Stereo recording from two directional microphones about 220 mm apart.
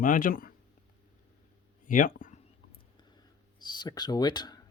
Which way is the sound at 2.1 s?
35° left (ahead or behind).